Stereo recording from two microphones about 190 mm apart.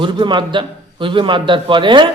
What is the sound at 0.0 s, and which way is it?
A man's voice, 25° right (ahead or behind).